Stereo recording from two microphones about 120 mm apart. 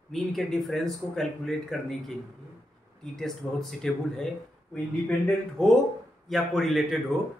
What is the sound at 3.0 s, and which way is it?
Speech, 5° left (ahead or behind).